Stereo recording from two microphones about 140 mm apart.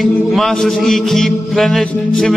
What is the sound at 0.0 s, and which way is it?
Mantra, centre (ahead or behind).